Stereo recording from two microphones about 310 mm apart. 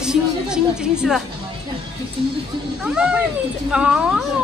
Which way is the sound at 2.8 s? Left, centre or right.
Centre.